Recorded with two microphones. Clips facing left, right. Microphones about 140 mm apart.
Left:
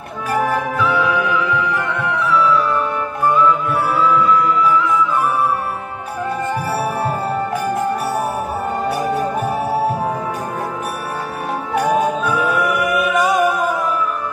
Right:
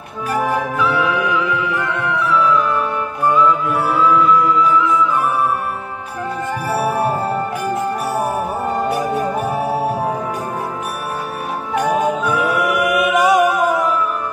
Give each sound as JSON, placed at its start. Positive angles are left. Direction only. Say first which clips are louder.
{"t": 0.9, "sound": "music", "louder": "even", "side_deg": -15}
{"t": 6.8, "sound": "music", "louder": "right 2 dB", "side_deg": -15}
{"t": 12.3, "sound": "music", "louder": "even", "side_deg": -20}